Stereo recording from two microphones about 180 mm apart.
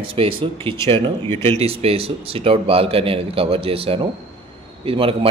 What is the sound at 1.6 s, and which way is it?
A man's voice, 35° right (ahead or behind).